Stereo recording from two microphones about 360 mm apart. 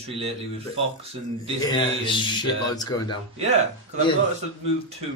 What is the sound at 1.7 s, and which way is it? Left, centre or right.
A man's voice, centre.